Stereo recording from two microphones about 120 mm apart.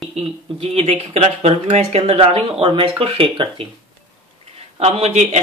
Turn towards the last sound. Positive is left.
turn(degrees=-75)  # may be behind; listen again after turning